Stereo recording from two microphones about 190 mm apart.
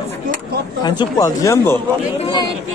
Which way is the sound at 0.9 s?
20° left (ahead or behind).